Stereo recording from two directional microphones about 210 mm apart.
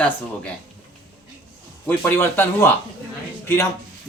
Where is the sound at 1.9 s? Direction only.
10° left (ahead or behind).